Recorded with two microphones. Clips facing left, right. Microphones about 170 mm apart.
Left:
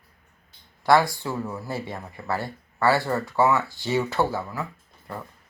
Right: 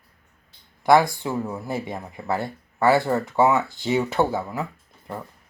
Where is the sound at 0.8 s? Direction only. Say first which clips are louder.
Right 2 dB; 15° right (ahead or behind).